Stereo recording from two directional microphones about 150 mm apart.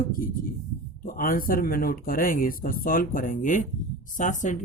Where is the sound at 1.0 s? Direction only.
70° left (ahead or behind).